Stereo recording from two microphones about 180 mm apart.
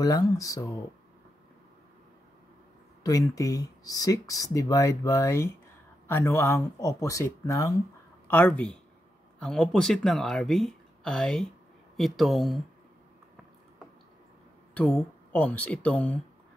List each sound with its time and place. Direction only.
0.0 s speech: 20° left (ahead or behind)
3.0 s speech: 20° left (ahead or behind); by 12.6 s centre (ahead or behind)
14.7 s speech: 10° left (ahead or behind)